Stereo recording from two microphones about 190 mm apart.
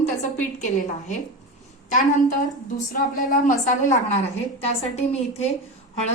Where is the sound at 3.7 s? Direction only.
40° left (ahead or behind).